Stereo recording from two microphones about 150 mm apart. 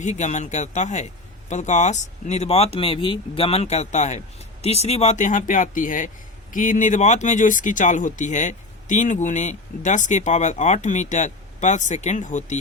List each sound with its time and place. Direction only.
0.0 s a man's voice: 50° left (ahead or behind)